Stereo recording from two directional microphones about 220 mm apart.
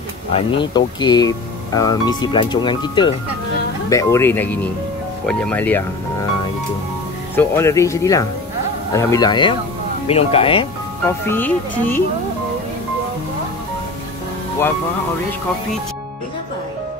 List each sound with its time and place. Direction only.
0.5 s speech: 20° left (ahead or behind)
7.3 s speech: 10° left (ahead or behind)
11.1 s speech: 10° left (ahead or behind)